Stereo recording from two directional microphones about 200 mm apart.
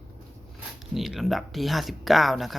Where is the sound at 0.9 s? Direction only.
Centre (ahead or behind).